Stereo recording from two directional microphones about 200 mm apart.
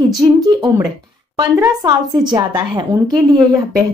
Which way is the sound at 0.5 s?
20° right (ahead or behind).